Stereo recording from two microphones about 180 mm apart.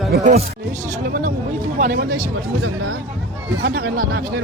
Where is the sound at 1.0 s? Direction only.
55° right (ahead or behind).